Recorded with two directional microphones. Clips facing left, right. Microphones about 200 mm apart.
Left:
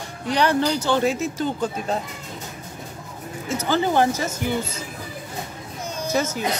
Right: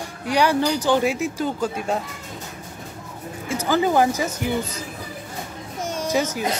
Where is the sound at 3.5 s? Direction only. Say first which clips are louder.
Right 1 dB; 10° right (ahead or behind).